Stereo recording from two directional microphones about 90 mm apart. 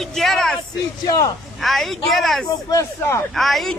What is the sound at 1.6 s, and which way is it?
A woman's voice, centre (ahead or behind).